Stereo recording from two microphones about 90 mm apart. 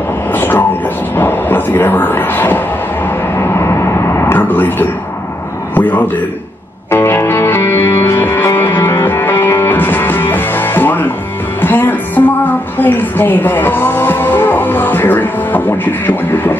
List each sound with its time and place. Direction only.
0.3 s train: 20° left (ahead or behind)
1.1 s music: 20° left (ahead or behind)
3.3 s vehicle: 30° left (ahead or behind)
4.4 s a sound: 20° left (ahead or behind)
6.9 s music: 25° left (ahead or behind)